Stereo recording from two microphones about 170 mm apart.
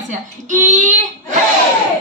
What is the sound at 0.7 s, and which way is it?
Speech, 50° right (ahead or behind).